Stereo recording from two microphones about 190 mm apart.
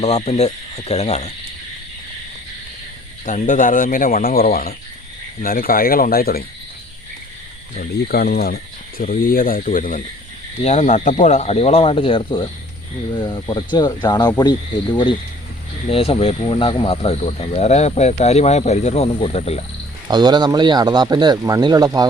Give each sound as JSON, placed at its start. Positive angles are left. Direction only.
{"t": 0.0, "sound": "speech", "side_deg": 35}
{"t": 3.2, "sound": "speech", "side_deg": 40}
{"t": 7.8, "sound": "speech", "side_deg": 55}
{"t": 15.9, "sound": "speech", "side_deg": 30}
{"t": 20.1, "sound": "speech", "side_deg": -20}